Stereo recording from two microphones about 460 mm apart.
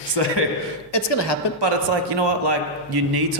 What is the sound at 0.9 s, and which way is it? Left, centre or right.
Speech, left.